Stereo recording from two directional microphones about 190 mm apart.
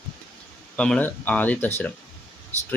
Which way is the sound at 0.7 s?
5° left (ahead or behind).